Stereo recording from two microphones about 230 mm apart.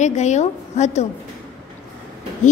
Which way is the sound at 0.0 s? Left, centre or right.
Left.